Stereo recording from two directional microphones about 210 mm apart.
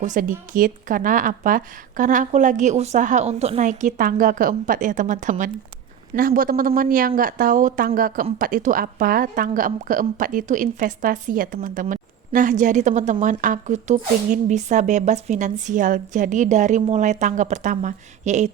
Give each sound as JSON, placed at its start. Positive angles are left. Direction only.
{"t": 0.0, "sound": "speech", "side_deg": -40}